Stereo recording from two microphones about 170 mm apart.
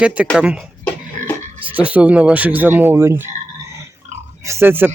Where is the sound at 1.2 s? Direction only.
50° right (ahead or behind).